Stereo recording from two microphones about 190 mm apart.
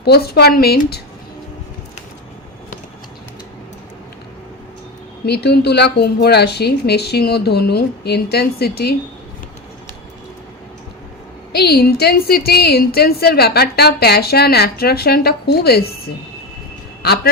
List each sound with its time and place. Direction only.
0.0 s a woman's voice: 60° left (ahead or behind)
5.2 s a woman's voice: 60° left (ahead or behind)
11.5 s a woman's voice: 55° left (ahead or behind)